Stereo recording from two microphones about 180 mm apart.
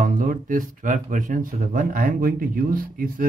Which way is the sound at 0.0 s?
50° right (ahead or behind).